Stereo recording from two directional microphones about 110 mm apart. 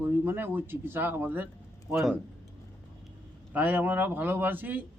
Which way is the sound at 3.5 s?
15° right (ahead or behind).